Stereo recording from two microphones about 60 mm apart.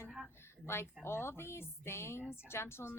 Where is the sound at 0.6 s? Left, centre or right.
Left.